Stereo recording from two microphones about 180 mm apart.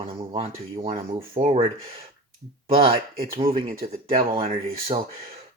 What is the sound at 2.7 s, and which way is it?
Speech, 35° right (ahead or behind).